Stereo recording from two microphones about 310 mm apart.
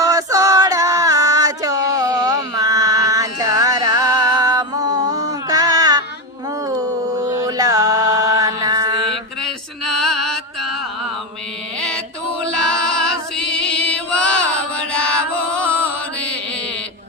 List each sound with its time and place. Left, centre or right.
0.0 s a sound: centre
5.1 s music: centre
7.3 s mantra: centre
9.4 s male singing: centre
10.3 s music: right
12.5 s male singing: right
13.3 s music: centre
15.2 s chant: right